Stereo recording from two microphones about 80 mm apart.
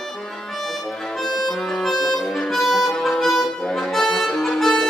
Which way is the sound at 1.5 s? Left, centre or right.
Centre.